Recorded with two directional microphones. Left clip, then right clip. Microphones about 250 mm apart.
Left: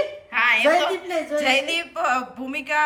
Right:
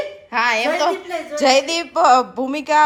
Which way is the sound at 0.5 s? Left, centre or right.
Right.